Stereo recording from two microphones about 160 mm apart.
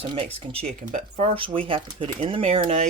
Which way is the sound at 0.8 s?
50° right (ahead or behind).